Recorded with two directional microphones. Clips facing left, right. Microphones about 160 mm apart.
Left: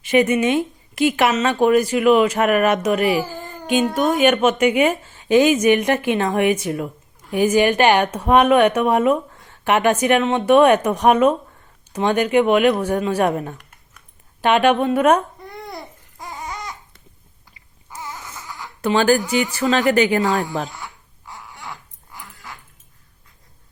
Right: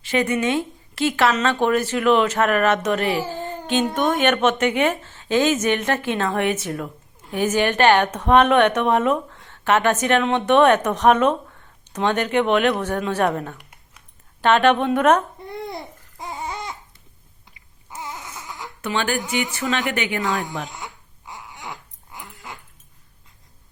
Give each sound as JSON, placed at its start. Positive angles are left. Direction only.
{"t": 0.0, "sound": "speech", "side_deg": 15}
{"t": 15.7, "sound": "babbling", "side_deg": -25}
{"t": 17.9, "sound": "baby cry", "side_deg": -25}
{"t": 18.8, "sound": "speech", "side_deg": 35}
{"t": 20.7, "sound": "dog", "side_deg": -20}